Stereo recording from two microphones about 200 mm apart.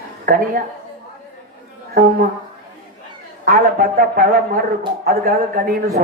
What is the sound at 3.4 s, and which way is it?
A man's voice, 50° right (ahead or behind).